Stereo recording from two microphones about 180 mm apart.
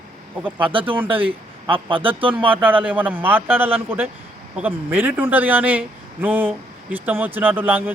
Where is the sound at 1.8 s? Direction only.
30° right (ahead or behind).